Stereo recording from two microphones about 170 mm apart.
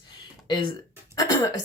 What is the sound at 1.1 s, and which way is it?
Speech, 20° left (ahead or behind).